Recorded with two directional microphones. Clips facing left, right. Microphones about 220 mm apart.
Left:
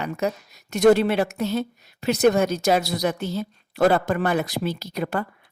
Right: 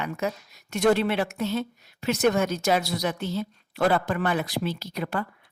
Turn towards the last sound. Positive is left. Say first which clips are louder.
# left 3 dB
turn(degrees=45)  # may be behind; listen again after turning